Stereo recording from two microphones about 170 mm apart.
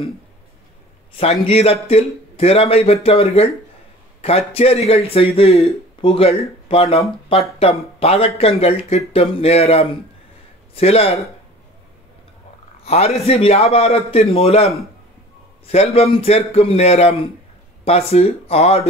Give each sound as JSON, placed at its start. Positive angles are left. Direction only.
{"t": 1.1, "sound": "a man's voice", "side_deg": 35}
{"t": 12.8, "sound": "a man's voice", "side_deg": 40}